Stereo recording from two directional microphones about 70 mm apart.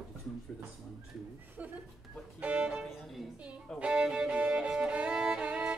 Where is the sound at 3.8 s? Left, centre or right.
Centre.